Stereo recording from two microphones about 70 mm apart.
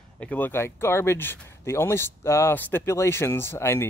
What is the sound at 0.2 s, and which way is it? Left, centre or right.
Speech, left.